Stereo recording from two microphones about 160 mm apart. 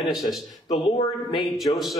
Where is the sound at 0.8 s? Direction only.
35° left (ahead or behind).